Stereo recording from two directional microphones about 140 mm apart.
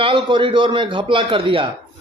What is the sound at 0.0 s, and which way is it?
A man's voice, 35° right (ahead or behind).